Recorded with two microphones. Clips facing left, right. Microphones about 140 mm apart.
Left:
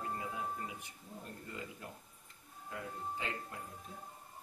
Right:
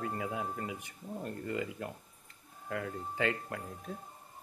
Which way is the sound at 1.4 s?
75° right (ahead or behind).